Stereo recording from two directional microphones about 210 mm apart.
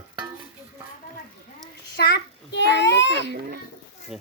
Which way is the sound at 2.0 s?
50° left (ahead or behind).